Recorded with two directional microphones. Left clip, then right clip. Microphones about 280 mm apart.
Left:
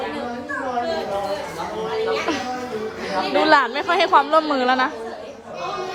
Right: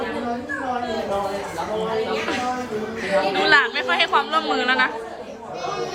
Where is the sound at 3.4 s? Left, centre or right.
Left.